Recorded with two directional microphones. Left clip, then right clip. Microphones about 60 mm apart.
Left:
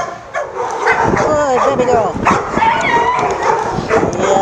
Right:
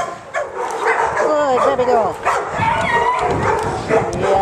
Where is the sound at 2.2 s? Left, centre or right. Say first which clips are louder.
Left 5 dB; left.